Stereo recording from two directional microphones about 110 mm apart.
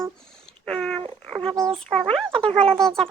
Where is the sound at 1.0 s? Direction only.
55° right (ahead or behind).